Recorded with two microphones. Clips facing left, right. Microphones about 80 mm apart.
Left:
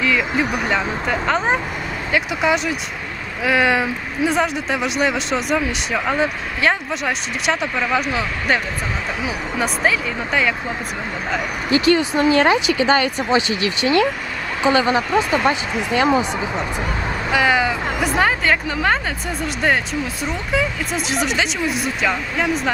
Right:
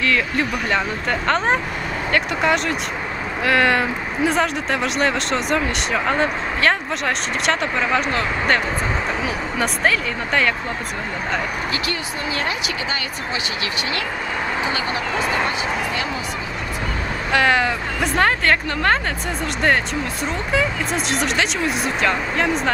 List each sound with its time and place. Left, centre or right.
0.0 s speech: centre
11.7 s speech: left
17.3 s speech: centre
20.5 s speech: centre